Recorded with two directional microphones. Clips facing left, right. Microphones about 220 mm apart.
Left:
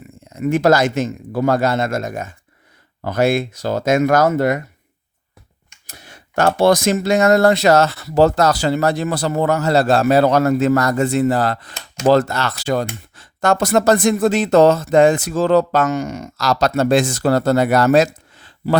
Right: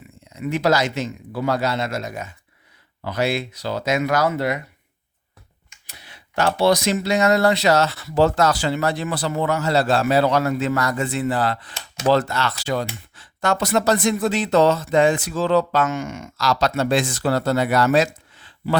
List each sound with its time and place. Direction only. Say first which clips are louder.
0.3 s speech: left 6 dB; 50° left (ahead or behind)
5.8 s speech: left 5 dB; 45° left (ahead or behind)